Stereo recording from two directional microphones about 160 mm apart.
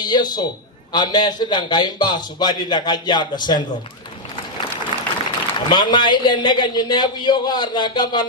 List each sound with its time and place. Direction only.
0.0 s a man's voice: 25° left (ahead or behind)
4.9 s applause: 25° right (ahead or behind)
5.5 s a man's voice: 30° left (ahead or behind)